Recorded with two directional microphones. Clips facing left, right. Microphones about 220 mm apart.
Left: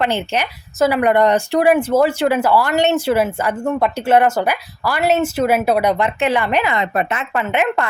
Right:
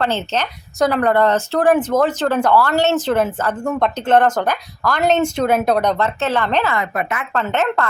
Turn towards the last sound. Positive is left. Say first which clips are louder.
# left 1 dB
turn(degrees=15)  # may be behind; listen again after turning